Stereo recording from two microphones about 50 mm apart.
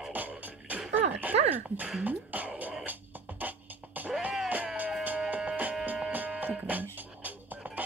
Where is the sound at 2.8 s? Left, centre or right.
Right.